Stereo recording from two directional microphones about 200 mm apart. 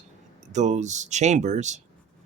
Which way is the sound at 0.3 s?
35° right (ahead or behind).